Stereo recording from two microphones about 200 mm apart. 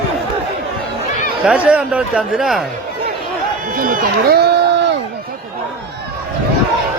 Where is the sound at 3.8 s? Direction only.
45° right (ahead or behind); by 4.9 s 60° right (ahead or behind).